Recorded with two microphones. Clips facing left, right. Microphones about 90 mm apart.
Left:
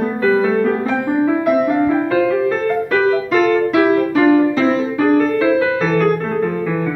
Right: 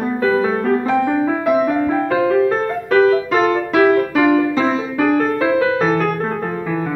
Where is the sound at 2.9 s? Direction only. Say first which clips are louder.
Right 5 dB; 30° right (ahead or behind).